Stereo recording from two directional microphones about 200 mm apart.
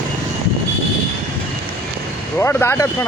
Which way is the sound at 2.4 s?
10° left (ahead or behind).